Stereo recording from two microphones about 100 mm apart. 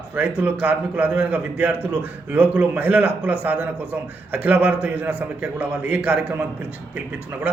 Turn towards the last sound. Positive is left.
turn(degrees=-15)  # may be behind; listen again after turning